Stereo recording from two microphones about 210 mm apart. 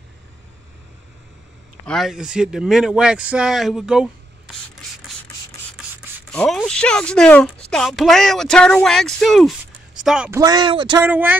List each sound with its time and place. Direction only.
1.9 s speech: centre (ahead or behind)
6.3 s speech: 5° left (ahead or behind)
10.4 s speech: 20° right (ahead or behind)
11.0 s speech: 10° right (ahead or behind)